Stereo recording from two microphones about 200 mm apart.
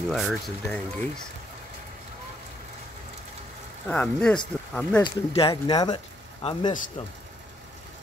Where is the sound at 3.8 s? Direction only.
5° left (ahead or behind).